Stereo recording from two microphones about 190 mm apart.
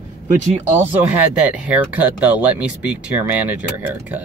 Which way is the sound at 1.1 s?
5° right (ahead or behind).